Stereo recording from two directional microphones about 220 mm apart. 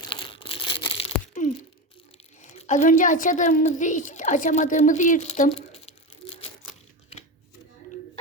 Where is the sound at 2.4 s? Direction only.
35° left (ahead or behind).